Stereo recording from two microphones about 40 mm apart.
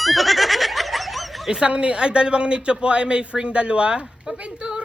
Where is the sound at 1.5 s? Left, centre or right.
Centre.